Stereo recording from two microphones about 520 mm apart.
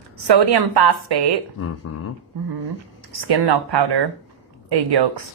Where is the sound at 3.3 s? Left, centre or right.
Right.